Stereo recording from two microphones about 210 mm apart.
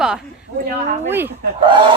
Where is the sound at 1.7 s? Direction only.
25° right (ahead or behind).